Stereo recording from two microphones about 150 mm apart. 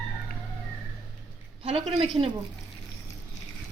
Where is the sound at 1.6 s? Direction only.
40° right (ahead or behind).